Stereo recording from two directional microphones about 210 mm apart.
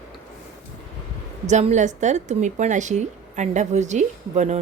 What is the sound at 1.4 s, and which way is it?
Speech, 35° right (ahead or behind).